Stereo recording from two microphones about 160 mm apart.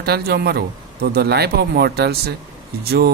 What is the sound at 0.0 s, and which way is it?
Speech, 80° right.